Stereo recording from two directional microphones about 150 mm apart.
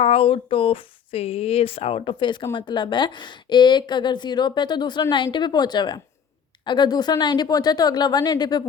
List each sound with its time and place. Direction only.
0.0 s speech: 40° left (ahead or behind)